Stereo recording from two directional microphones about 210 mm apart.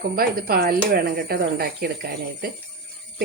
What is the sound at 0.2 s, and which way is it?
Speech, 45° right (ahead or behind).